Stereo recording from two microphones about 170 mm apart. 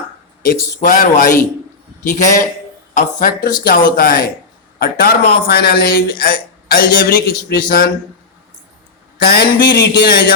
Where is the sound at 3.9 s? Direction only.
65° left (ahead or behind).